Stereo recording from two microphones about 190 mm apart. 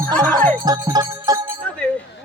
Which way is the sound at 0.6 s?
20° right (ahead or behind).